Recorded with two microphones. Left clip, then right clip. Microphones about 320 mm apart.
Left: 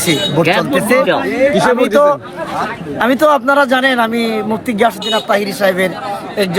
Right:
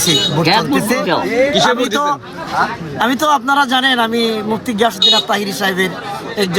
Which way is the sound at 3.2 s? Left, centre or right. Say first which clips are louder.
Left 3 dB; centre.